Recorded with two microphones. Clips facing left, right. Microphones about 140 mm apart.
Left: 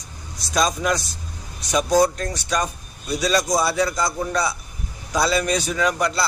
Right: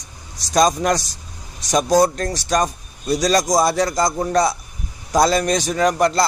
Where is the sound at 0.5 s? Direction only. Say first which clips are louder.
Right 5 dB; 40° right (ahead or behind).